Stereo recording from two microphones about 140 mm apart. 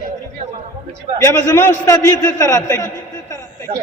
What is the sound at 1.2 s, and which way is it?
A man's voice, 20° left (ahead or behind).